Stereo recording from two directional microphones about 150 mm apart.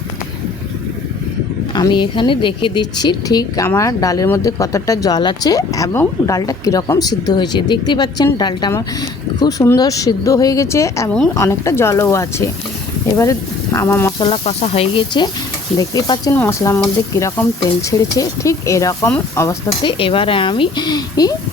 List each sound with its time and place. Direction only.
1.7 s a woman's voice: 30° left (ahead or behind)
13.7 s speech: 15° left (ahead or behind)
14.2 s a woman's voice: 40° left (ahead or behind)
15.8 s speech: 25° left (ahead or behind)
16.3 s speech: 15° left (ahead or behind)
19.9 s a woman's voice: 35° left (ahead or behind)